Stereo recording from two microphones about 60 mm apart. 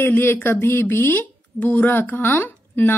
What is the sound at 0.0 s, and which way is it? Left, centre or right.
A woman's voice, left.